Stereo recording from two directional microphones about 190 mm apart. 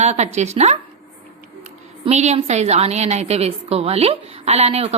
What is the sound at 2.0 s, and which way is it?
A woman's voice, 35° right (ahead or behind).